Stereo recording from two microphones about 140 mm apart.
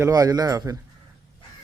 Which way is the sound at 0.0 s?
25° right (ahead or behind).